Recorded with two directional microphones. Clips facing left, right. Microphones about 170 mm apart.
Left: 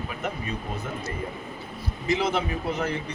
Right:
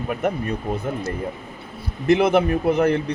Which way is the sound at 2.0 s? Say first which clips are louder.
Right 9 dB; 60° right (ahead or behind).